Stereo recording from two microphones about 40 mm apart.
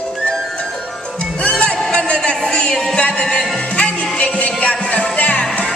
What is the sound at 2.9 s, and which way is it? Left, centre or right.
Music, left.